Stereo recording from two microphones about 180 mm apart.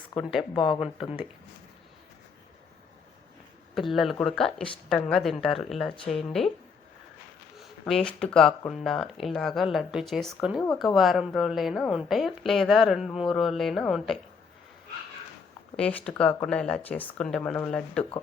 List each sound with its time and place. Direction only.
0.1 s speech: 25° left (ahead or behind)
3.8 s a woman's voice: centre (ahead or behind)
7.6 s a woman's voice: centre (ahead or behind)
15.7 s a woman's voice: 5° left (ahead or behind)